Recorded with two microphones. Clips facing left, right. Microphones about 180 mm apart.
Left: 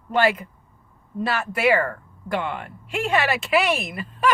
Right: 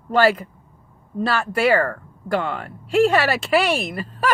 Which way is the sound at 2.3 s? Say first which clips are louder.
Right 3 dB; 40° right (ahead or behind).